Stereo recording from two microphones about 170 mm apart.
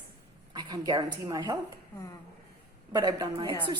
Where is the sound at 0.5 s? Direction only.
20° right (ahead or behind).